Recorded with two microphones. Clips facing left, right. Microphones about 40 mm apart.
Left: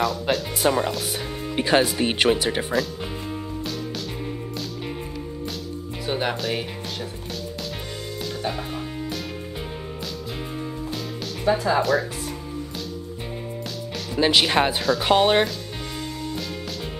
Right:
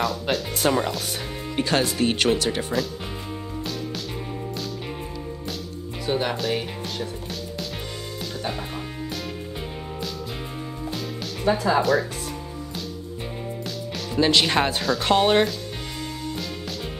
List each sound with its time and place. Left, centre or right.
0.0 s speech: centre
1.6 s speech: centre
6.0 s speech: centre
8.4 s music: centre
11.4 s speech: centre
14.2 s speech: centre